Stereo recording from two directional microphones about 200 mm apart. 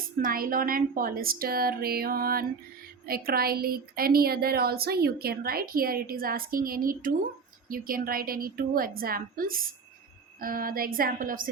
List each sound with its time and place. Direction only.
0.2 s a woman's voice: 45° right (ahead or behind)